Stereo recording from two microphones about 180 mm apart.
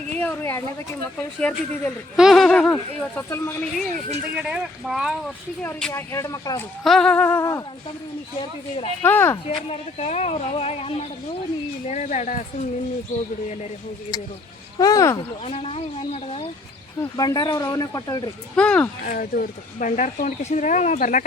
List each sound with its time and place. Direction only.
0.1 s a sound: 5° left (ahead or behind)
1.4 s speech: 5° left (ahead or behind)
4.4 s speech: 5° right (ahead or behind)
5.6 s speech: 15° left (ahead or behind)
6.8 s speech: 5° left (ahead or behind)
8.4 s speech: 30° left (ahead or behind)
9.0 s speech: 10° left (ahead or behind)
9.6 s speech: 35° left (ahead or behind)
14.8 s speech: 20° left (ahead or behind)
15.4 s speech: 30° left (ahead or behind)
17.2 s speech: 20° left (ahead or behind)
18.5 s speech: 5° left (ahead or behind)
19.0 s speech: 50° left (ahead or behind)